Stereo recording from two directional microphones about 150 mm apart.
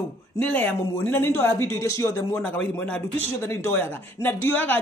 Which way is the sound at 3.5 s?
15° left (ahead or behind).